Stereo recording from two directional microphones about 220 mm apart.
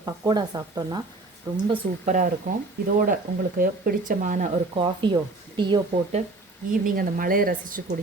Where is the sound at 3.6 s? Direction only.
40° right (ahead or behind).